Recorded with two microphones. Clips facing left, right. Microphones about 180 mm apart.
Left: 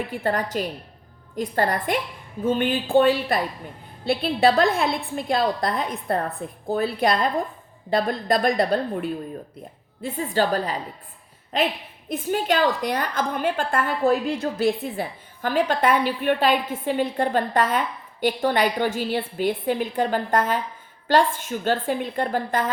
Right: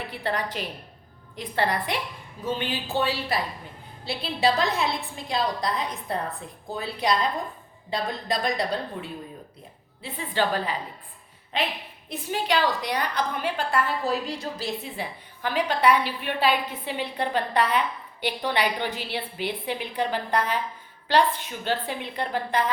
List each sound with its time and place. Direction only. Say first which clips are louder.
0.1 s a woman's voice: left 5 dB; 45° left (ahead or behind)
10.0 s a woman's voice: left 4 dB; 45° left (ahead or behind)